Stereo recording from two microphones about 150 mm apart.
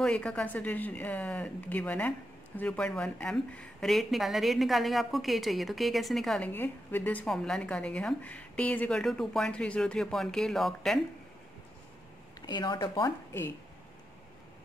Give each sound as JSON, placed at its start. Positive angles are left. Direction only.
{"t": 0.0, "sound": "speech", "side_deg": 5}
{"t": 6.5, "sound": "speech", "side_deg": 15}
{"t": 12.4, "sound": "speech", "side_deg": 30}